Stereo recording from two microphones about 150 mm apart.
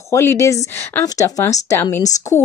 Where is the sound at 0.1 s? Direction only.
20° left (ahead or behind).